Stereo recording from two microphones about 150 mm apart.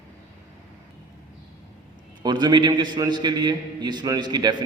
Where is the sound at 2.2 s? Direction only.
30° right (ahead or behind).